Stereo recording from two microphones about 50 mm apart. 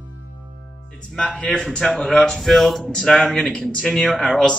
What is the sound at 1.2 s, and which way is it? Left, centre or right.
Speech, left.